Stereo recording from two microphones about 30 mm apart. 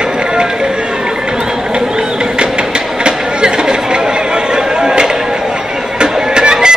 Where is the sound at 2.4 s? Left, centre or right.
Right.